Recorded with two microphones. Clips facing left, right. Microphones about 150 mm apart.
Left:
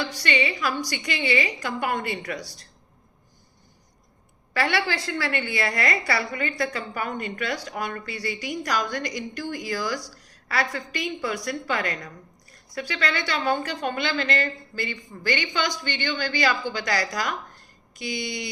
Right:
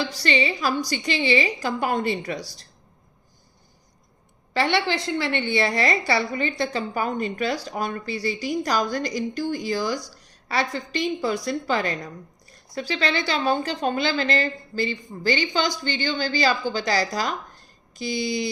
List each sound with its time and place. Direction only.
0.0 s a woman's voice: 30° right (ahead or behind)
4.5 s a woman's voice: 25° right (ahead or behind)